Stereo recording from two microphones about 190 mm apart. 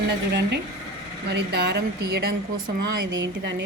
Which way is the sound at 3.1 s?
70° right (ahead or behind).